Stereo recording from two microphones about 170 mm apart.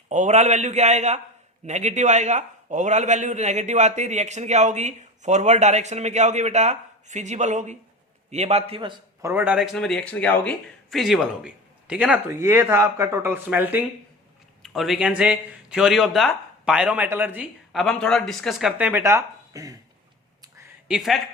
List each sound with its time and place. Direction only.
0.1 s a man's voice: 45° right (ahead or behind)
9.2 s speech: 10° right (ahead or behind)
9.7 s speech: 5° left (ahead or behind)
14.6 s speech: centre (ahead or behind)
18.8 s speech: 10° right (ahead or behind)
20.8 s speech: centre (ahead or behind)